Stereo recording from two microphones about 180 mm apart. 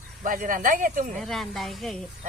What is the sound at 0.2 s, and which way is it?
Speech, 50° right (ahead or behind).